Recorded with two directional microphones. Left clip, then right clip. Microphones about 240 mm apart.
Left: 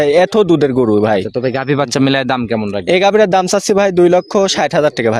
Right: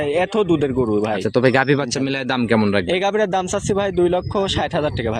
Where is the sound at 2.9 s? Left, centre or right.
Left.